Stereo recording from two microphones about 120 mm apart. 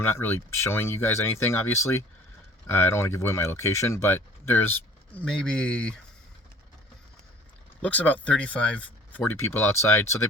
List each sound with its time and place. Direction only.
0.0 s speech: 20° left (ahead or behind)
7.8 s speech: 10° left (ahead or behind)